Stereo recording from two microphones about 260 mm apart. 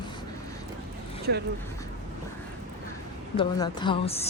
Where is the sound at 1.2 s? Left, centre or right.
Right.